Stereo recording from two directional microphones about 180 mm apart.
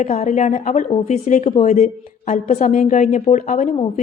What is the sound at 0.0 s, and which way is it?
A woman's voice, 40° left (ahead or behind).